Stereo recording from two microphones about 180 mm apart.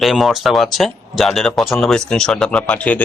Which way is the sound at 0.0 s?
Centre (ahead or behind).